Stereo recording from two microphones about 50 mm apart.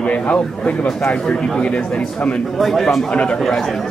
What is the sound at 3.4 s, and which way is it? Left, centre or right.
Speech, centre.